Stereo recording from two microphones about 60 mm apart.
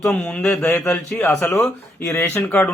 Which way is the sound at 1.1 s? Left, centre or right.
Centre.